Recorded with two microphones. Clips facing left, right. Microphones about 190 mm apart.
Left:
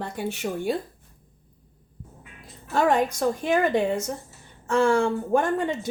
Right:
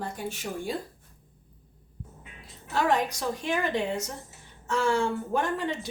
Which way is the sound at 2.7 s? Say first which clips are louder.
Left 4 dB; 50° left (ahead or behind).